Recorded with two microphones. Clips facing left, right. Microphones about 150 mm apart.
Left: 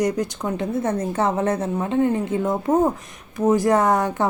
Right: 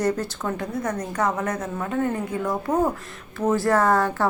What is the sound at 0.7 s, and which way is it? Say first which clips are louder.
A woman's voice: left 4 dB; 25° left (ahead or behind).